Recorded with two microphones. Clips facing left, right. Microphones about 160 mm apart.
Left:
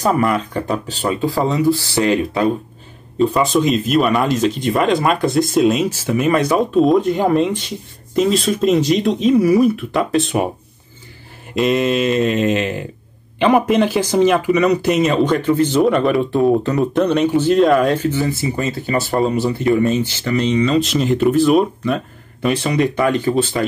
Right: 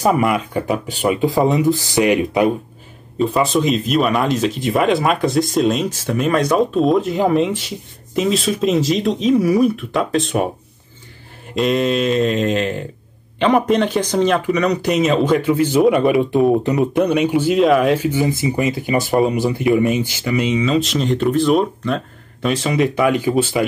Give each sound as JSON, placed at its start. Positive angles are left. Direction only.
{"t": 0.0, "sound": "speech", "side_deg": -5}
{"t": 3.2, "sound": "speech", "side_deg": 0}
{"t": 11.5, "sound": "speech", "side_deg": 0}